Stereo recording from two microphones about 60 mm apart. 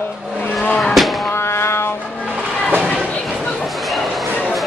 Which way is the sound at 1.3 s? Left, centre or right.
Left.